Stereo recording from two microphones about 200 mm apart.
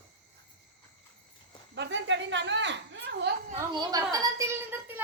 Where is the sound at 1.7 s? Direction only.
60° right (ahead or behind).